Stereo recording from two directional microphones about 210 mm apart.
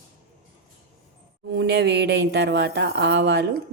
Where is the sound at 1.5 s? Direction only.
55° right (ahead or behind).